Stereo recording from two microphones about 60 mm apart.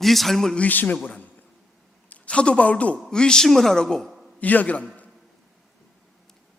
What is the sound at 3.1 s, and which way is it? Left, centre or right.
A woman's voice, centre.